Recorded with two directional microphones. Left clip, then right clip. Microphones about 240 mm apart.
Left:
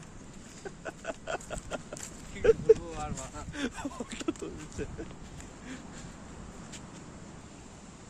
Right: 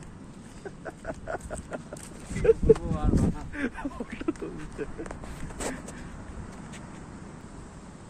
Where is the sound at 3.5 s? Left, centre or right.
Centre.